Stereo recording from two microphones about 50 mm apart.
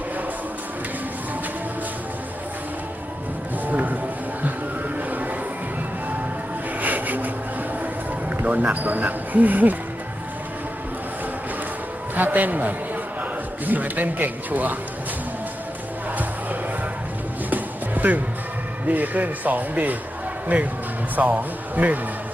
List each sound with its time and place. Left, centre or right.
3.7 s a sound: right
4.9 s a sound: right
6.7 s a sound: right
8.3 s music: right
8.7 s speech: right
12.1 s speech: right
17.5 s music: right
18.9 s speech: right
21.2 s speech: right